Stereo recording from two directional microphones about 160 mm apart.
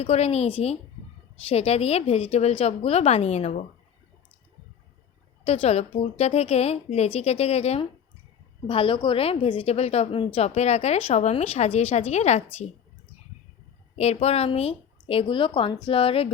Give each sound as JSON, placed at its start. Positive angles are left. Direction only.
{"t": 0.0, "sound": "a woman's voice", "side_deg": 40}
{"t": 6.0, "sound": "a woman's voice", "side_deg": 40}
{"t": 14.0, "sound": "a woman's voice", "side_deg": 40}